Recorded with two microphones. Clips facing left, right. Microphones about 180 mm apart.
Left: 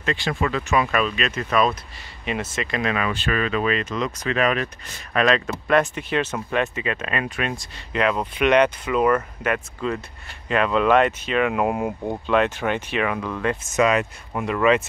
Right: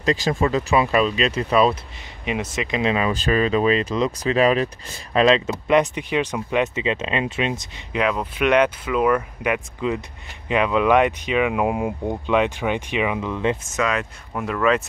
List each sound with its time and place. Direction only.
0.0 s speech: 35° right (ahead or behind)
2.2 s speech: 15° right (ahead or behind)
7.9 s speech: 5° right (ahead or behind)
12.3 s speech: 15° right (ahead or behind)
13.7 s speech: 10° left (ahead or behind)